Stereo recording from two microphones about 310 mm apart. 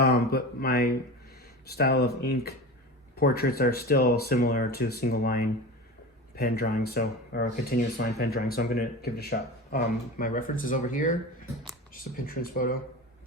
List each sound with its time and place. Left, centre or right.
0.0 s speech: left